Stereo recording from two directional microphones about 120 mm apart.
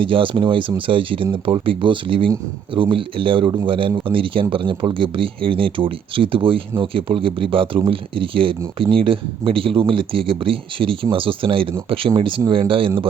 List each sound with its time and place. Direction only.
0.0 s speech: 45° right (ahead or behind)